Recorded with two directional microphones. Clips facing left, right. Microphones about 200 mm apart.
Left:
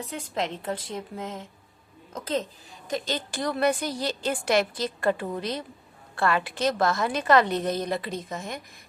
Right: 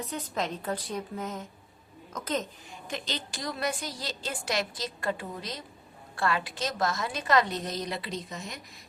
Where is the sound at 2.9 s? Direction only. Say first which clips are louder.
Left 6 dB; 45° left (ahead or behind).